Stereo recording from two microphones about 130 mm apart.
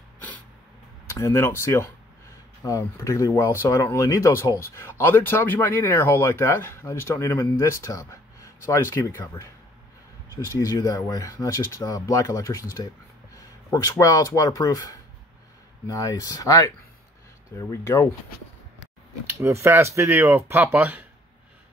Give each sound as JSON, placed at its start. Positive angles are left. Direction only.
{"t": 1.1, "sound": "speech", "side_deg": 20}
{"t": 13.7, "sound": "speech", "side_deg": 25}
{"t": 19.2, "sound": "speech", "side_deg": -20}